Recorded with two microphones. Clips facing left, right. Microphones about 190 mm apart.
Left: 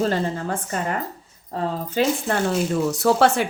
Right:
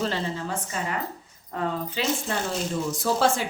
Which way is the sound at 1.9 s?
55° left (ahead or behind).